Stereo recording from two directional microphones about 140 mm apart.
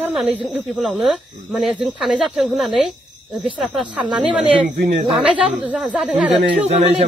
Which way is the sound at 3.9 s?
10° right (ahead or behind).